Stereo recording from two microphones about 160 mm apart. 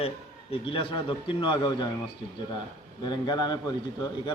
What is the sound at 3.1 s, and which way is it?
Speech, 25° left (ahead or behind).